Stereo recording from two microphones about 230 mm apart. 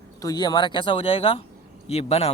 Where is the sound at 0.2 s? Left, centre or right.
Centre.